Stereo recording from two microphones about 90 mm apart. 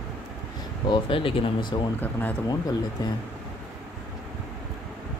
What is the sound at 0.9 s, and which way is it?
Speech, 70° left (ahead or behind).